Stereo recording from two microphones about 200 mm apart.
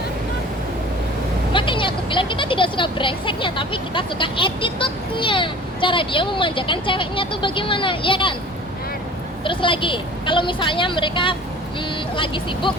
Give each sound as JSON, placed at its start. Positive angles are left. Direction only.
{"t": 1.5, "sound": "speech", "side_deg": 25}
{"t": 9.4, "sound": "speech", "side_deg": 25}